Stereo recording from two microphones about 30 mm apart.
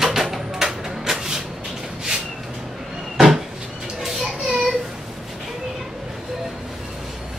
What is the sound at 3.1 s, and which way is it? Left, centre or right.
Cupboard open or close, centre.